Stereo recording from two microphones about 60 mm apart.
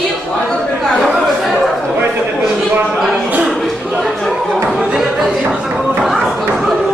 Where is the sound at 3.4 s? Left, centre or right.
Centre.